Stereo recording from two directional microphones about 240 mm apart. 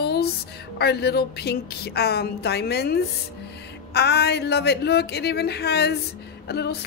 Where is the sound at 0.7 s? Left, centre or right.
Left.